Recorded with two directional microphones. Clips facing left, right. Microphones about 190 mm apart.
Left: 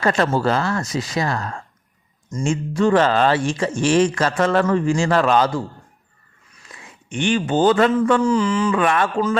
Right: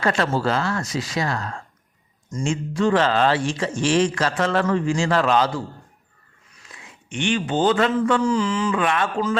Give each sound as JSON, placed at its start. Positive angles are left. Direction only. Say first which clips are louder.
{"t": 0.0, "sound": "speech", "louder": "left 3 dB", "side_deg": 45}
{"t": 7.1, "sound": "speech", "louder": "left 3 dB", "side_deg": 40}